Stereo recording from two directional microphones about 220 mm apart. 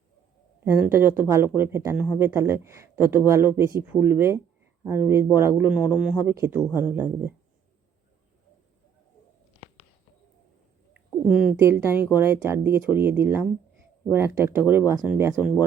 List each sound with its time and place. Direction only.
0.6 s speech: 10° right (ahead or behind)
10.9 s speech: centre (ahead or behind)